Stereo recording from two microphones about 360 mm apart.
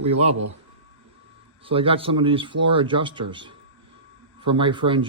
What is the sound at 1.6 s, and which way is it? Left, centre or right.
Speech, centre.